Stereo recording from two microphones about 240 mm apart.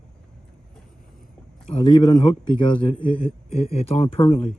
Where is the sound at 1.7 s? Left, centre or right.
Centre.